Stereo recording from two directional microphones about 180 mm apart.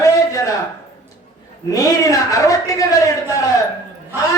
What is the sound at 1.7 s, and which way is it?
Speech, 20° left (ahead or behind).